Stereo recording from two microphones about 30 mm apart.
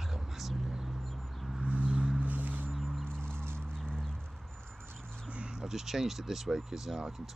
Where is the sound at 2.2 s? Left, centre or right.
Right.